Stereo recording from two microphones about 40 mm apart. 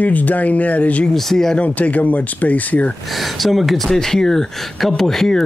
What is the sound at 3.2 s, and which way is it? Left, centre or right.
Speech, centre.